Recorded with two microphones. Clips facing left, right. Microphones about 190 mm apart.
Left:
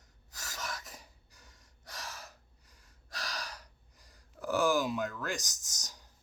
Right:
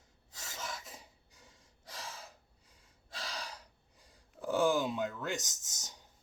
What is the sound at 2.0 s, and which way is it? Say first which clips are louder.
Gasp: left 1 dB; 25° right (ahead or behind).